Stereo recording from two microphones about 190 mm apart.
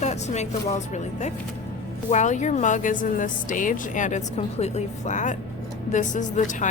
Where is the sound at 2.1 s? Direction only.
40° left (ahead or behind).